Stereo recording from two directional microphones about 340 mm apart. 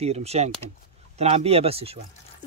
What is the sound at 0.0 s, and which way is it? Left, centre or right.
Speech, centre.